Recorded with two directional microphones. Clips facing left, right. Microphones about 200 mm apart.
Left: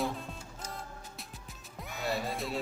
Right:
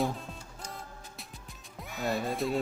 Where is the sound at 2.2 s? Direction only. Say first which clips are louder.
Right 5 dB; centre (ahead or behind).